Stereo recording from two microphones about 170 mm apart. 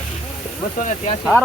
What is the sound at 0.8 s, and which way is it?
Speech, 40° left (ahead or behind).